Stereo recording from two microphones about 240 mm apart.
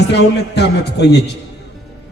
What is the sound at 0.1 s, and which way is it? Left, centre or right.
Speech, left.